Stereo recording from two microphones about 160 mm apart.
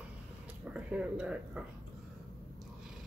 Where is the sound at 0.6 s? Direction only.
5° right (ahead or behind).